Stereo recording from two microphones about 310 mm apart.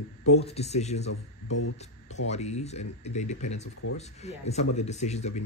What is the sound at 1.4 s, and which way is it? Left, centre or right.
Speech, left.